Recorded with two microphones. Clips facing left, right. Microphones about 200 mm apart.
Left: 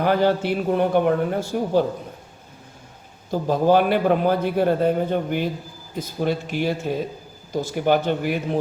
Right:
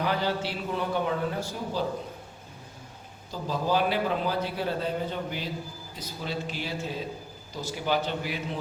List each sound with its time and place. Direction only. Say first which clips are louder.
0.0 s a man's voice: left 9 dB; 50° left (ahead or behind)
3.3 s a man's voice: left 9 dB; 55° left (ahead or behind)